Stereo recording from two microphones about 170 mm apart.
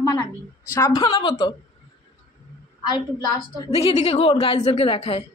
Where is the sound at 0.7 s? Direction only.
20° left (ahead or behind).